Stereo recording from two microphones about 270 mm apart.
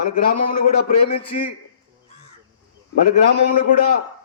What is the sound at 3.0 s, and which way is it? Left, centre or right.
Speech, left.